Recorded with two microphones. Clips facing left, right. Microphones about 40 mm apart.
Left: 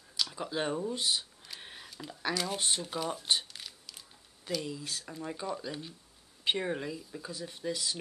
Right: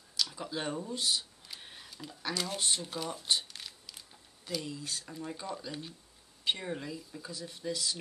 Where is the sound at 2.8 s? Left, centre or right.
Centre.